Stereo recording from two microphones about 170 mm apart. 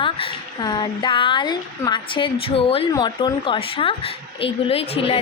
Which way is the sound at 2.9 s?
25° left (ahead or behind).